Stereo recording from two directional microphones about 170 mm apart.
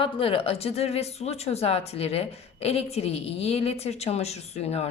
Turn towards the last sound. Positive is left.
turn(degrees=40)  # may be behind; listen again after turning